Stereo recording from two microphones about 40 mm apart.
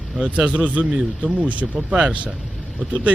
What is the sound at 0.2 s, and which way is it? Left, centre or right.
A man's voice, right.